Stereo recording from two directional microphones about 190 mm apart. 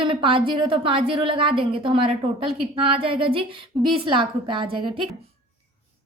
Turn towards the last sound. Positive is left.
turn(degrees=-25)  # may be behind; listen again after turning